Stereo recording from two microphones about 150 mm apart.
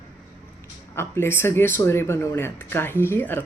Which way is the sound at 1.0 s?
15° left (ahead or behind).